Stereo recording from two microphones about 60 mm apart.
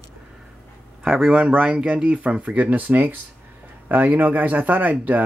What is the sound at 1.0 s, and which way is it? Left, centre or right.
Speech, centre.